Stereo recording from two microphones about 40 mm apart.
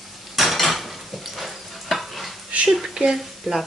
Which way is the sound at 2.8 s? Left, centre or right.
Centre.